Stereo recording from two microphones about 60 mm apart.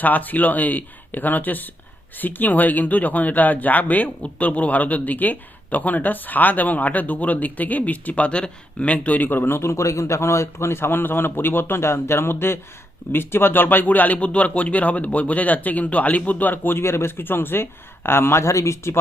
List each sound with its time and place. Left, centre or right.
0.0 s speech: left
9.7 s a man's voice: left